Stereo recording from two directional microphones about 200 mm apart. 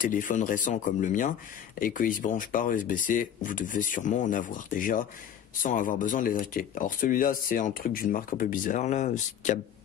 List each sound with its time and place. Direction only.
0.0 s speech: 40° left (ahead or behind)